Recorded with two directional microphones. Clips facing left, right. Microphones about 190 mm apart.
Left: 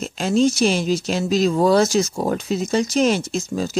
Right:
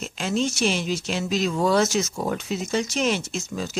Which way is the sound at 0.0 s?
35° left (ahead or behind).